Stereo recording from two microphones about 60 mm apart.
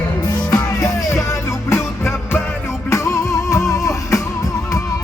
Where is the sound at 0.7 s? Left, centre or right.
Left.